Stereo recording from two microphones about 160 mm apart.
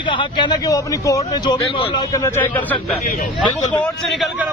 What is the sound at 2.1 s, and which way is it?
Speech, 20° left (ahead or behind).